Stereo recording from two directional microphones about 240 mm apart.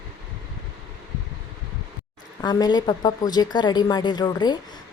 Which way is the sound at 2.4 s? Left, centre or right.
Centre.